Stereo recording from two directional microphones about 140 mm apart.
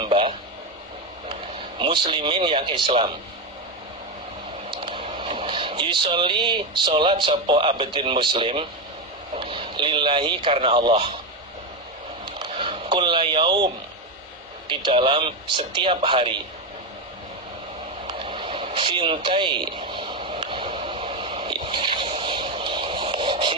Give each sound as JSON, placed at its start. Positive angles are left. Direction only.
{"t": 0.0, "sound": "a sound", "side_deg": -40}
{"t": 1.8, "sound": "speech", "side_deg": -35}
{"t": 4.7, "sound": "speech", "side_deg": -35}
{"t": 12.2, "sound": "a sound", "side_deg": -35}
{"t": 14.7, "sound": "speech", "side_deg": -35}
{"t": 18.1, "sound": "radio", "side_deg": -35}